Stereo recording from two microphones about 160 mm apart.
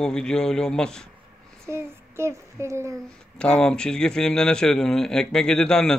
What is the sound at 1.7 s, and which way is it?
Child singing, 15° right (ahead or behind).